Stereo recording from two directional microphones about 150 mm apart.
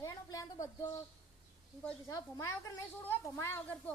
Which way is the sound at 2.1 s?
20° left (ahead or behind).